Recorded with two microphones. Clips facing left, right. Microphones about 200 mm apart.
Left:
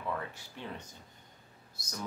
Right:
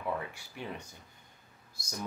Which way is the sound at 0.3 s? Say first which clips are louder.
Right 2 dB; 10° right (ahead or behind).